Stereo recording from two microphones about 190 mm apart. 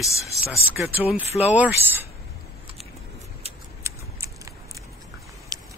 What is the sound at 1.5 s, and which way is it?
Speech, 10° right (ahead or behind).